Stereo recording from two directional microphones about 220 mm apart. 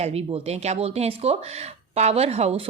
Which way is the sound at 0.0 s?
25° right (ahead or behind).